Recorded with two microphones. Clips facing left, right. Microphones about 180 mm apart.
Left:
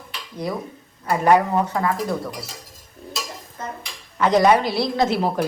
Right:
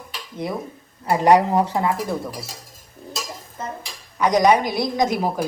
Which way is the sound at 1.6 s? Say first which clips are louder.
Right 1 dB; 30° right (ahead or behind).